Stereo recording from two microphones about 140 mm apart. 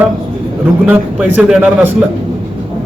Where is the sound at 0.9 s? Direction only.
10° right (ahead or behind).